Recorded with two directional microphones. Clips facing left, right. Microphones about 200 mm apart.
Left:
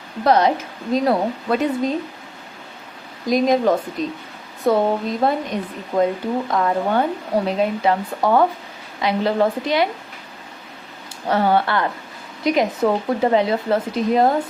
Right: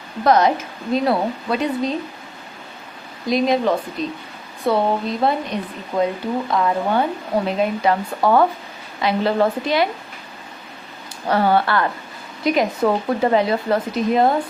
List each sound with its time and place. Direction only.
0.3 s speech: 30° left (ahead or behind); by 2.0 s 50° left (ahead or behind)
3.2 s a woman's voice: 45° left (ahead or behind); by 9.9 s 20° left (ahead or behind)
11.3 s speech: 20° left (ahead or behind); by 14.4 s 40° left (ahead or behind)